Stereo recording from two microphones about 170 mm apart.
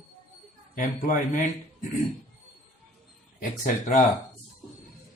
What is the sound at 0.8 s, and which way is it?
Speech, 50° left (ahead or behind).